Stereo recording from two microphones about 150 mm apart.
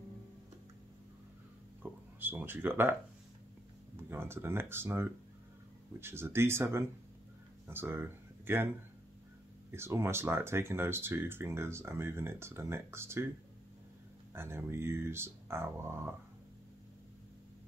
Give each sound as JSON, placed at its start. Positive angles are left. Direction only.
{"t": 1.8, "sound": "a sound", "side_deg": -15}
{"t": 3.9, "sound": "speech", "side_deg": -15}
{"t": 9.7, "sound": "speech", "side_deg": -15}
{"t": 14.3, "sound": "speech", "side_deg": -15}